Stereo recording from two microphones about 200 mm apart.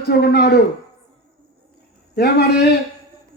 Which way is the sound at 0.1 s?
55° left (ahead or behind).